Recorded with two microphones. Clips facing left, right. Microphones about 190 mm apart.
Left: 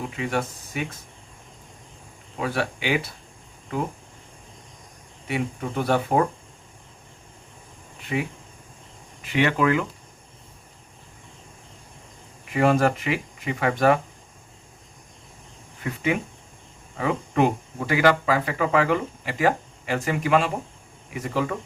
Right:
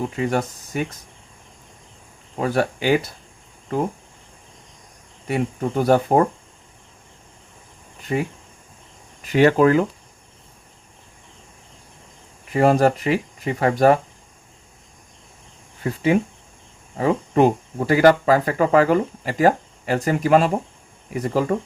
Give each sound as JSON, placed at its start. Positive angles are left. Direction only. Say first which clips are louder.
{"t": 0.2, "sound": "speech", "louder": "right 3 dB", "side_deg": -40}
{"t": 2.4, "sound": "speech", "louder": "right 6 dB", "side_deg": -40}
{"t": 5.3, "sound": "speech", "louder": "right 5 dB", "side_deg": -40}
{"t": 8.1, "sound": "speech", "louder": "right 4 dB", "side_deg": -45}
{"t": 12.5, "sound": "speech", "louder": "right 4 dB", "side_deg": -35}
{"t": 15.8, "sound": "speech", "louder": "right 6 dB", "side_deg": -35}